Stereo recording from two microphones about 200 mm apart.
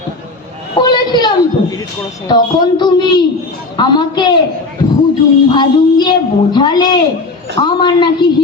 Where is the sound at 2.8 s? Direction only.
20° left (ahead or behind).